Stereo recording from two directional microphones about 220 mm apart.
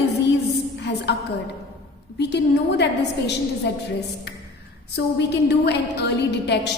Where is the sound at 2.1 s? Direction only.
50° left (ahead or behind).